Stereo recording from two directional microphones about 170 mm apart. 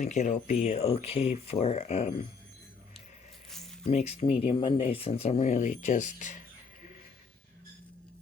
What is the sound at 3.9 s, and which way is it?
Speech, 40° left (ahead or behind).